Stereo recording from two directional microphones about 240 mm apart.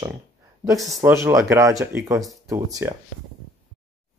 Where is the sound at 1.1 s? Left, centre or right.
Centre.